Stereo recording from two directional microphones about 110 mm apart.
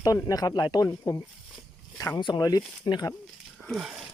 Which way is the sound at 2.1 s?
45° left (ahead or behind).